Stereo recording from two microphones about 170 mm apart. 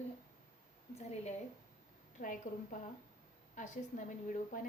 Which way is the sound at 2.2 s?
50° left (ahead or behind).